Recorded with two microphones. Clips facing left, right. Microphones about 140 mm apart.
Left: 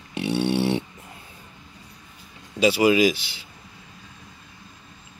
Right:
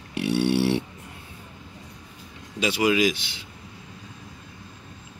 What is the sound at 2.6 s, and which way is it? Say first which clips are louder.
Speech: left 4 dB; 5° left (ahead or behind).